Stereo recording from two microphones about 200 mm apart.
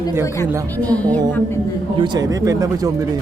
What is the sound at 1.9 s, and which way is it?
Speech, 20° right (ahead or behind).